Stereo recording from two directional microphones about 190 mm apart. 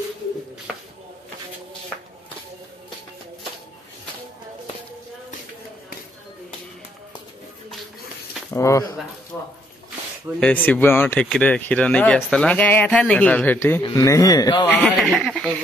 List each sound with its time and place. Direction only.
8.5 s speech: 15° left (ahead or behind)
9.3 s a sound: 10° left (ahead or behind)
10.4 s a man's voice: 10° left (ahead or behind)
14.7 s speech: 5° left (ahead or behind)